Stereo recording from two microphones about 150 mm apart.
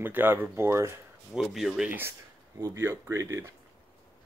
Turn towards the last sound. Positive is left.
turn(degrees=-20)  # may be behind; listen again after turning